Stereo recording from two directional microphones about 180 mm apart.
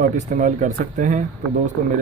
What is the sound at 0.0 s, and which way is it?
Speech, 45° right (ahead or behind).